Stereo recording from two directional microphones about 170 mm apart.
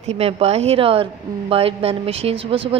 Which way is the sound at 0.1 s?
40° right (ahead or behind).